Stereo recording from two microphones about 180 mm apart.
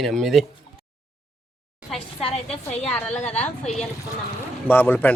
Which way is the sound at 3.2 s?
35° left (ahead or behind).